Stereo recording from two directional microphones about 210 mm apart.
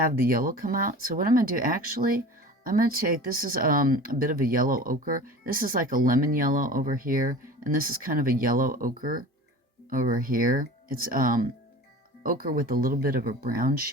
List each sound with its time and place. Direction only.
0.0 s speech: 45° right (ahead or behind)